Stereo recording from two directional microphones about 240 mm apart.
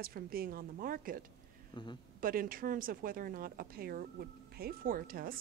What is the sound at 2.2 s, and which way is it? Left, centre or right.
Speech, right.